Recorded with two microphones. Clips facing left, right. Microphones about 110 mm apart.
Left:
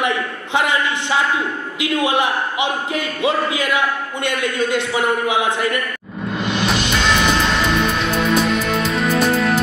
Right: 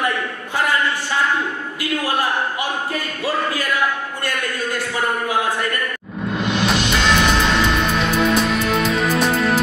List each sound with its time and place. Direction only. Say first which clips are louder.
0.6 s a sound: left 1 dB; 20° left (ahead or behind)
1.8 s a man's voice: left 4 dB; 20° left (ahead or behind)
6.3 s music: even; centre (ahead or behind)